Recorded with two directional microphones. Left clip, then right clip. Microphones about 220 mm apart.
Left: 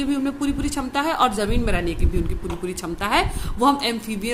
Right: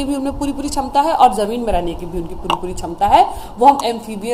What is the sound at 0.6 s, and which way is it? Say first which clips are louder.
Speech: right 12 dB; 35° left (ahead or behind).